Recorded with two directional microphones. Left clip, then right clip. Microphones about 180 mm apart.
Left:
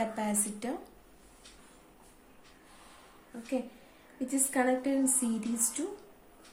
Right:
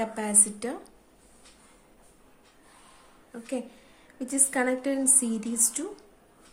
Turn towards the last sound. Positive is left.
turn(degrees=-35)  # may be behind; listen again after turning